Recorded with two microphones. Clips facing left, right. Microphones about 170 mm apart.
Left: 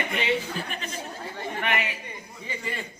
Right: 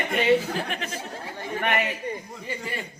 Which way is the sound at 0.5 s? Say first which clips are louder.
Right 4 dB; 80° right.